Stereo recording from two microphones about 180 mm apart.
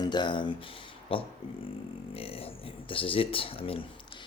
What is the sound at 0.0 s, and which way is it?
Speech, 25° left (ahead or behind).